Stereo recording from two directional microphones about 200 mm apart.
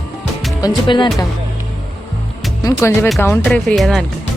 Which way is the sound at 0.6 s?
25° left (ahead or behind).